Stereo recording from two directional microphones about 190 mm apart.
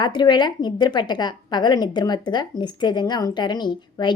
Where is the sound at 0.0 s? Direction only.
25° left (ahead or behind).